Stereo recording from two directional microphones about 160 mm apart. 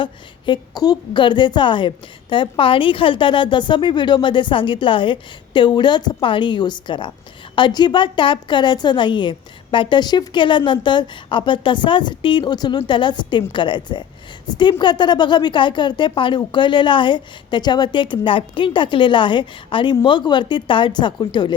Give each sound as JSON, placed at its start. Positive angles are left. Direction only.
{"t": 0.0, "sound": "a woman's voice", "side_deg": 30}